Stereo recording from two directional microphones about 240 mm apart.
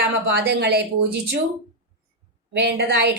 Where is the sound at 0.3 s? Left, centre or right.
Right.